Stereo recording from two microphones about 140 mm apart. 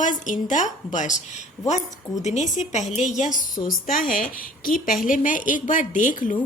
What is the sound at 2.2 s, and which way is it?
A woman's voice, 55° left (ahead or behind).